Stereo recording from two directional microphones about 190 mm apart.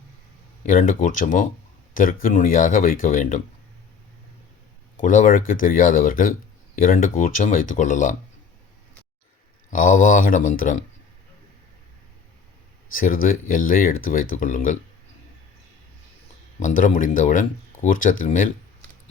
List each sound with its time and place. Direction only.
0.6 s speech: 45° left (ahead or behind)
4.9 s speech: 45° left (ahead or behind)
9.6 s speech: 45° left (ahead or behind)
13.2 s speech: 45° left (ahead or behind)
16.6 s speech: 45° left (ahead or behind)